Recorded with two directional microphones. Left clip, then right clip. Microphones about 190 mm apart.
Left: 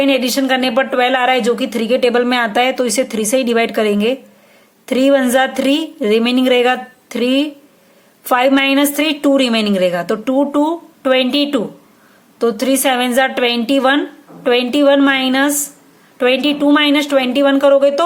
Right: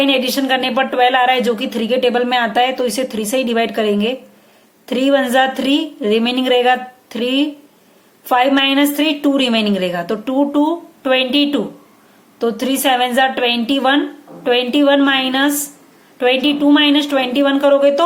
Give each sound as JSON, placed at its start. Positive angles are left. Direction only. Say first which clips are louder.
{"t": 0.0, "sound": "speech", "louder": "left 1 dB", "side_deg": 30}